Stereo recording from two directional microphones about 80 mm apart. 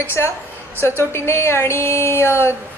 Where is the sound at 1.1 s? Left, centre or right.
Left.